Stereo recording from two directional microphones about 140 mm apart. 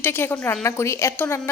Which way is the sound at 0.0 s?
15° left (ahead or behind).